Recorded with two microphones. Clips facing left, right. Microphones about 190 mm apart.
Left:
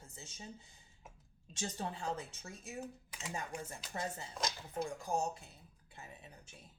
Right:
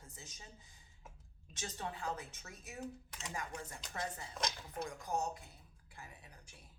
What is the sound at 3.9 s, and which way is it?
Speech, 25° left (ahead or behind).